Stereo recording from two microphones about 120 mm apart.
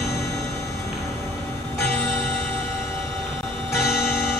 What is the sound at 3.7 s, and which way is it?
Music, 20° left (ahead or behind).